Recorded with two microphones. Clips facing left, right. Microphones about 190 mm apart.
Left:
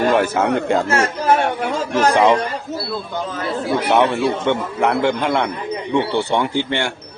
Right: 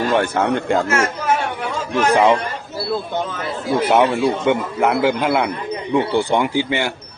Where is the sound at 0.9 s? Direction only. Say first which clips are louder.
Left 1 dB; 35° left (ahead or behind).